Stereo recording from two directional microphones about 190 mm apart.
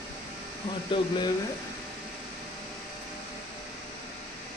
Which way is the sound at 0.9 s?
25° left (ahead or behind).